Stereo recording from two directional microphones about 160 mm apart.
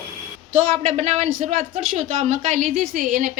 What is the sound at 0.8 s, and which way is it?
A woman's voice, 45° right (ahead or behind).